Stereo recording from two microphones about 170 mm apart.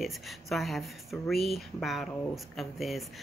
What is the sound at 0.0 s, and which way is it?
Speech, centre (ahead or behind).